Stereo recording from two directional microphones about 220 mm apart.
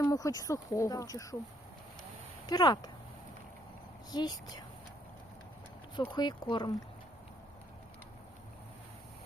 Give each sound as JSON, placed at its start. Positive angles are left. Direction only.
{"t": 0.0, "sound": "speech", "side_deg": 15}
{"t": 2.5, "sound": "speech", "side_deg": 20}
{"t": 4.1, "sound": "speech", "side_deg": 20}
{"t": 6.0, "sound": "speech", "side_deg": 20}